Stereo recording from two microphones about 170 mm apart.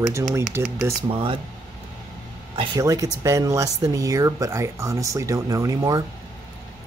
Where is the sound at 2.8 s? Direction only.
20° right (ahead or behind).